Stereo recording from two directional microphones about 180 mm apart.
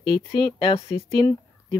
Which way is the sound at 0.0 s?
25° left (ahead or behind).